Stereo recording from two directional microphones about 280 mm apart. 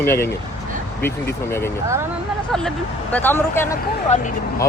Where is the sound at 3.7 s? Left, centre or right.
Left.